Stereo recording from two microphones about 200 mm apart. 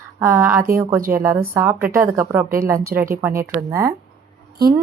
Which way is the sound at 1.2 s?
10° right (ahead or behind).